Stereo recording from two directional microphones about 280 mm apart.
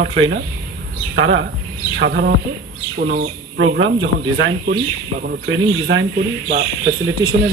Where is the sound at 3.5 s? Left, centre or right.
Right.